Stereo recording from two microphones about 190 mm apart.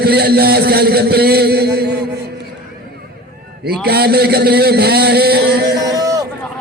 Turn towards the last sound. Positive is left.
turn(degrees=-20)  # may be behind; listen again after turning